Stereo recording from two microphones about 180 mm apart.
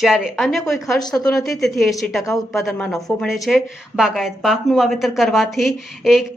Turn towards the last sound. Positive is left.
turn(degrees=0)  # may be behind; listen again after turning